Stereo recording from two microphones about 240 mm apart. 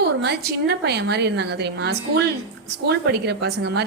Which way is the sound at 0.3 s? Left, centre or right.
Right.